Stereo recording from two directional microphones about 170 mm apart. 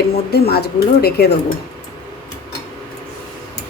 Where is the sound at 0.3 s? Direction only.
70° left (ahead or behind).